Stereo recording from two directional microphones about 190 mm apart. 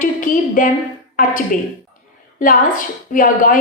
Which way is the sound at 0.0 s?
45° left (ahead or behind).